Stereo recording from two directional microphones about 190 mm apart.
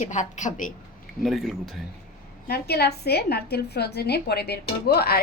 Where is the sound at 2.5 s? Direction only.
55° left (ahead or behind).